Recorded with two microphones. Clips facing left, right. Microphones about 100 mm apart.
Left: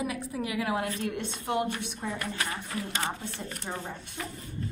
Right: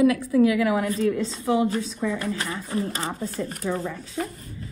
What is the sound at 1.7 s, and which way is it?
Speech, 30° right (ahead or behind).